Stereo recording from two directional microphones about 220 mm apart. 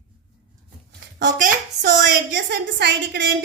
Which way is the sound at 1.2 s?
35° right (ahead or behind).